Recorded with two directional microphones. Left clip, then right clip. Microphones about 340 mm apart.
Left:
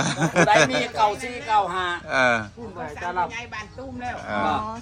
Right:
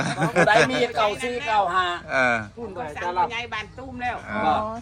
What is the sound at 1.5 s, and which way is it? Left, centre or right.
Speech, right.